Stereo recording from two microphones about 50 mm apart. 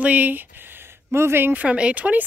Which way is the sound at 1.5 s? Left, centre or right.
Right.